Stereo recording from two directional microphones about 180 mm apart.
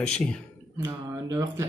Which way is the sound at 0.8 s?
20° right (ahead or behind).